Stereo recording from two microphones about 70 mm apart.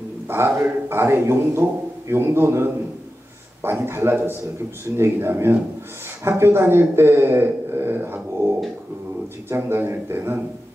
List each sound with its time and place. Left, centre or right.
0.3 s a man's voice: right
9.5 s a man's voice: right